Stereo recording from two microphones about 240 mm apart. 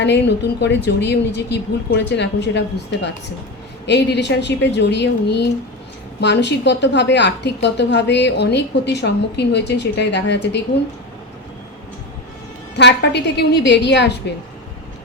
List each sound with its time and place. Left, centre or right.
0.0 s a woman's voice: left
12.7 s a woman's voice: left